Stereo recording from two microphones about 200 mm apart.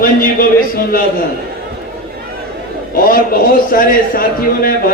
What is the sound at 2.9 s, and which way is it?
A man's voice, 45° left (ahead or behind).